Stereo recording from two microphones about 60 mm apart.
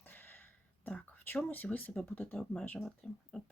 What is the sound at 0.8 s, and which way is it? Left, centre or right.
Speech, left.